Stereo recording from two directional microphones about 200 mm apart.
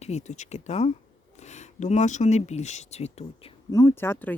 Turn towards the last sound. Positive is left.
turn(degrees=10)  # may be behind; listen again after turning